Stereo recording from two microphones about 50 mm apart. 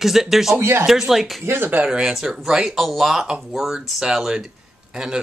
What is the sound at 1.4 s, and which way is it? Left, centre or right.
Speech, right.